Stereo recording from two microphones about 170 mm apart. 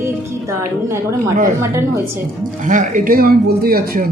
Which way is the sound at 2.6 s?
50° right (ahead or behind).